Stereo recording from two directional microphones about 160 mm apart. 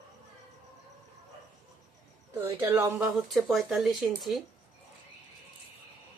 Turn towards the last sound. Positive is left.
turn(degrees=0)  # may be behind; listen again after turning